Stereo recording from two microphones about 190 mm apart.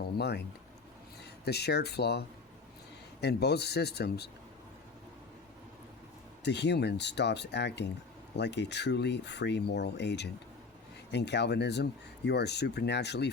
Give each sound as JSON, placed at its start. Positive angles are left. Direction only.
{"t": 0.2, "sound": "speech", "side_deg": 60}
{"t": 6.4, "sound": "speech", "side_deg": 65}